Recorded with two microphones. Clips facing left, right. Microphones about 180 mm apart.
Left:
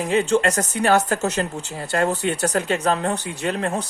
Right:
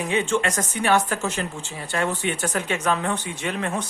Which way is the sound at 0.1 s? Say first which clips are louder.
Left 5 dB; 35° left (ahead or behind).